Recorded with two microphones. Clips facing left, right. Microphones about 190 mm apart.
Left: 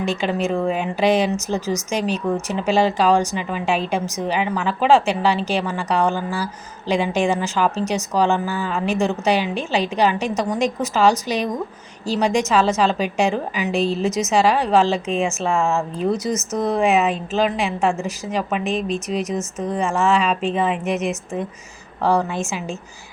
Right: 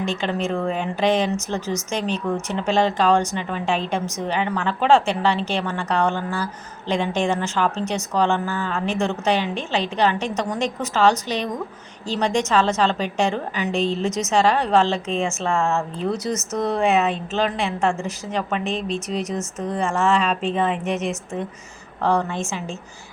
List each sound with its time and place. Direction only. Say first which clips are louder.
0.0 s speech: left 2 dB; 10° left (ahead or behind)
18.9 s speech: left 2 dB; 30° right (ahead or behind)
19.5 s a woman's voice: left 1 dB; 5° left (ahead or behind)